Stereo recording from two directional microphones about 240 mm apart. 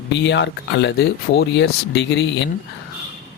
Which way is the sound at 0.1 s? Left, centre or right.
Left.